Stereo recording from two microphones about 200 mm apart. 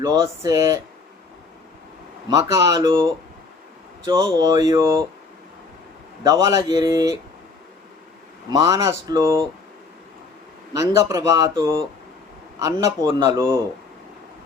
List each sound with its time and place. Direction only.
0.0 s speech: 20° right (ahead or behind)
2.3 s speech: 15° right (ahead or behind)
4.4 s speech: 20° right (ahead or behind)
6.2 s speech: 15° right (ahead or behind)
8.4 s speech: 15° right (ahead or behind)
10.8 s speech: 15° right (ahead or behind)